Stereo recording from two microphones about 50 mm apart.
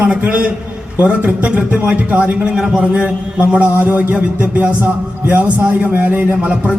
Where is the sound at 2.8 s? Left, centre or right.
Right.